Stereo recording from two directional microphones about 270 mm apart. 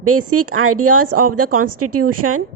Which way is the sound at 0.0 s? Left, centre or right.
Right.